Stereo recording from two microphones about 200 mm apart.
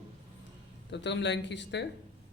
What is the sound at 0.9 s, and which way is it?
Speech, 60° left (ahead or behind).